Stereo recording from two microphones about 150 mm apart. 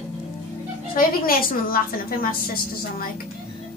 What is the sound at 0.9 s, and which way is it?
A woman's voice, 70° left (ahead or behind).